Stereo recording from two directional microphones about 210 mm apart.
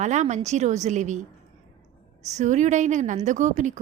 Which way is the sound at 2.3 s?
35° right (ahead or behind).